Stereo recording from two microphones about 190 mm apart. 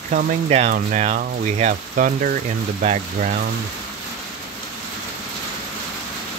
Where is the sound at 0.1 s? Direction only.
35° right (ahead or behind).